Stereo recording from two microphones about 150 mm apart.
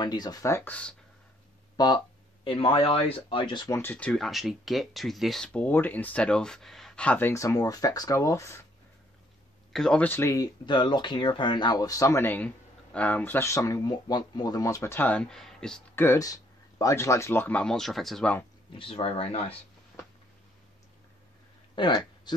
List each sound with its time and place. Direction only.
0.0 s speech: 25° left (ahead or behind); by 0.9 s 10° left (ahead or behind)
1.8 s speech: 25° left (ahead or behind)
2.4 s speech: 35° left (ahead or behind)
3.7 s speech: 10° left (ahead or behind)
9.7 s speech: 5° left (ahead or behind)
15.9 s speech: 15° left (ahead or behind)
18.7 s speech: 35° left (ahead or behind)
21.7 s speech: 30° left (ahead or behind)